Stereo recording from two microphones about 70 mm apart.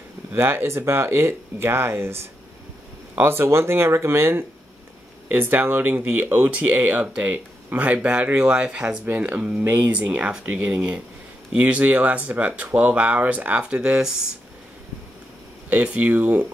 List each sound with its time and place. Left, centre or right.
0.3 s speech: right
5.3 s speech: right
9.0 s speech: right
15.7 s speech: centre